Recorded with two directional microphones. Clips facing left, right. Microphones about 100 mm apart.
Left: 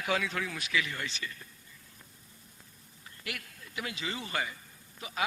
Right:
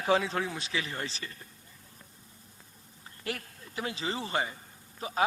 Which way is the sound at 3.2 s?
35° right (ahead or behind).